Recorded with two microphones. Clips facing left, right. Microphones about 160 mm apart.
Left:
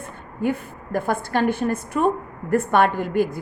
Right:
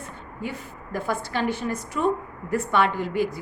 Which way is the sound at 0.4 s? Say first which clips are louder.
Left 10 dB; 55° left (ahead or behind).